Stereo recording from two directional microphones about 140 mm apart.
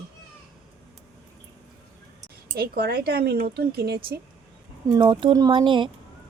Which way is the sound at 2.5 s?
90° right.